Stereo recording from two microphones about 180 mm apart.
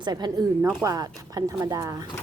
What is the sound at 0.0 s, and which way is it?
Speech, 25° right (ahead or behind).